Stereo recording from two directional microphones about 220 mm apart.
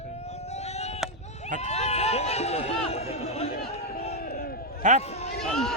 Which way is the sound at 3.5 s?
45° left (ahead or behind).